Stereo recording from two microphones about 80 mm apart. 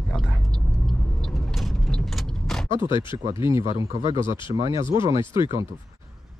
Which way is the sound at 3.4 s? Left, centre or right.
Right.